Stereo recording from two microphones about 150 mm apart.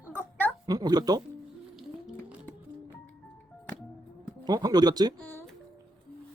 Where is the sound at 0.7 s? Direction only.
25° right (ahead or behind).